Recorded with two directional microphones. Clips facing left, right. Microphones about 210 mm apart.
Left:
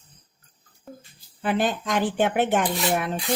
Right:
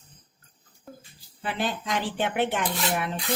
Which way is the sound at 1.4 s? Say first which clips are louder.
Left 6 dB; 45° left (ahead or behind).